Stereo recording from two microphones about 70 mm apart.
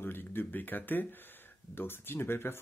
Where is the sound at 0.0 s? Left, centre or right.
Left.